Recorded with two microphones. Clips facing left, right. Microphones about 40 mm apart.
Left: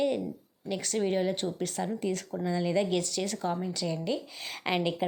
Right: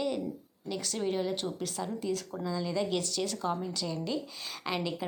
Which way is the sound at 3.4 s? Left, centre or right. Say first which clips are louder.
Left 1 dB; left.